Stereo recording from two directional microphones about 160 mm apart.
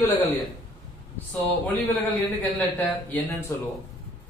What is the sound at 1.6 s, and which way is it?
A man's voice, 10° left (ahead or behind).